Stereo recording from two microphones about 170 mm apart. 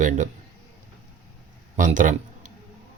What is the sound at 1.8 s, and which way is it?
Speech, 50° right (ahead or behind).